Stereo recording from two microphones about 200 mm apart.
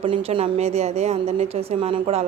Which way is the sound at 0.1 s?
30° right (ahead or behind).